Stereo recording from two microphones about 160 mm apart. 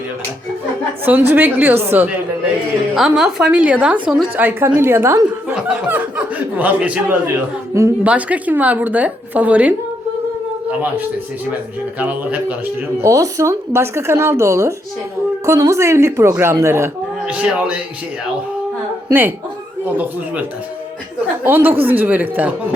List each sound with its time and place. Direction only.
1.0 s a woman's voice: 10° right (ahead or behind)
5.5 s chuckle: 10° right (ahead or behind)
7.7 s a woman's voice: 15° right (ahead or behind)
11.9 s a woman's voice: 10° right (ahead or behind)
19.0 s a woman's voice: 10° right (ahead or behind)
21.4 s a woman's voice: 15° right (ahead or behind)